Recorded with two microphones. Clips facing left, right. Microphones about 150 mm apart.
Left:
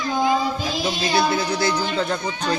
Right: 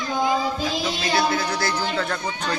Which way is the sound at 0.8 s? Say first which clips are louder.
Left 3 dB; 25° left (ahead or behind).